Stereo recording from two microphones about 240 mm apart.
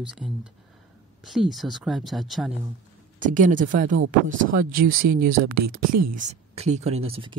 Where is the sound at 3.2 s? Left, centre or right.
Right.